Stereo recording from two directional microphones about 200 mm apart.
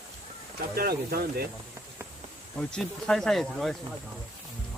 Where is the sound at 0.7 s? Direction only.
50° right (ahead or behind).